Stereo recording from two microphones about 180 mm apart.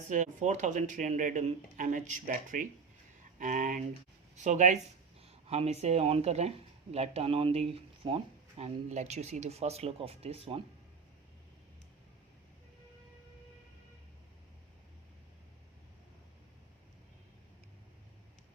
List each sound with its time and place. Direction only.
0.1 s speech: 45° right (ahead or behind)